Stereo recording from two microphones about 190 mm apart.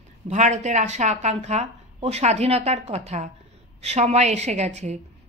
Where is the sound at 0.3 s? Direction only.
40° right (ahead or behind).